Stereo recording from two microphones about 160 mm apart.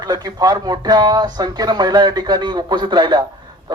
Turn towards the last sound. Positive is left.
turn(degrees=-25)  # may be behind; listen again after turning